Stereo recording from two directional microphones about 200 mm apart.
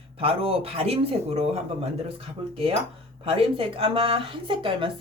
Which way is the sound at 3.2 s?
25° right (ahead or behind).